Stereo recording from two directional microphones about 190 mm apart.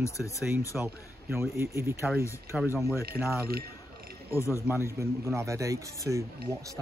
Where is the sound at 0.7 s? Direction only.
15° right (ahead or behind).